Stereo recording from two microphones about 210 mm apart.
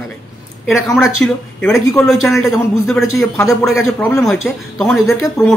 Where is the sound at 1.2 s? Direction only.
5° left (ahead or behind).